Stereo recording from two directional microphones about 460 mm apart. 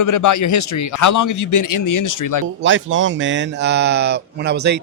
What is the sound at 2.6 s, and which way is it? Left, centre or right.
Speech, right.